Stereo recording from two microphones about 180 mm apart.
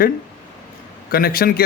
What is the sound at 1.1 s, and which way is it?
Speech, 55° left (ahead or behind).